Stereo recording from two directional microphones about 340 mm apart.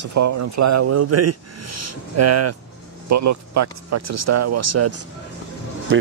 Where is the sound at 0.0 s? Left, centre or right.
Right.